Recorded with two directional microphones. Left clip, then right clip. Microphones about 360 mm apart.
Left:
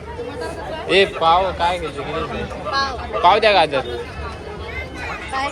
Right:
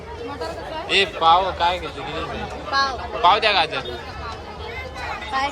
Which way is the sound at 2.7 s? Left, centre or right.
Right.